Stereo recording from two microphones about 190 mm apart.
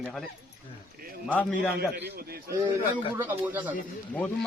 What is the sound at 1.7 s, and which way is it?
Speech, 60° right (ahead or behind).